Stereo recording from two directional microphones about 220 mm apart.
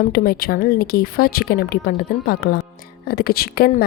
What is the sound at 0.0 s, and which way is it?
Speech, 40° left (ahead or behind).